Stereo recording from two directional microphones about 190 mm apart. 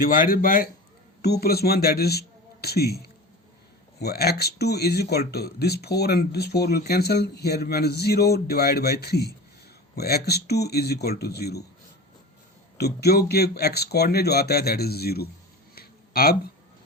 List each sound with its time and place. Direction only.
0.1 s a man's voice: 50° left (ahead or behind)
12.7 s speech: 55° left (ahead or behind)
15.7 s a sound: 55° left (ahead or behind)